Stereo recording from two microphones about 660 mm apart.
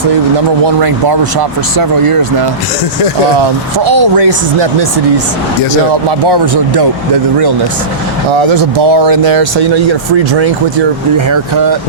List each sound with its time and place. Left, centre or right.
0.8 s speech: right
3.8 s speech: right
8.4 s speech: right